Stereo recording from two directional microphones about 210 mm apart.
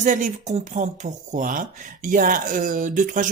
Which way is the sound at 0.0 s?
35° right (ahead or behind).